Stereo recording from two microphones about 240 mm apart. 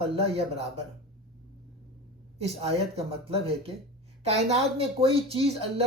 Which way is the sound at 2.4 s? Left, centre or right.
Right.